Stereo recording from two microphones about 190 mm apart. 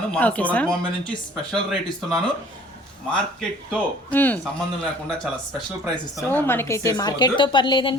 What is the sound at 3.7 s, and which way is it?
Speech, 10° left (ahead or behind).